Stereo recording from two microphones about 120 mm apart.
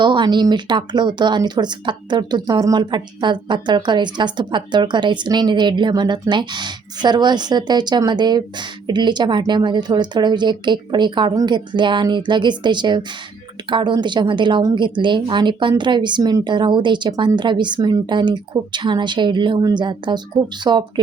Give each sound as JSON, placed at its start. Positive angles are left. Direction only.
{"t": 0.0, "sound": "speech", "side_deg": -40}